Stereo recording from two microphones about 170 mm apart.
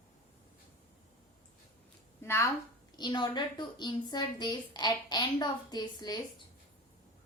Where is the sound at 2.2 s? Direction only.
15° left (ahead or behind).